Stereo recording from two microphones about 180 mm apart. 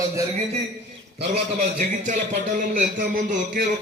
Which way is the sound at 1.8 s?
45° right (ahead or behind).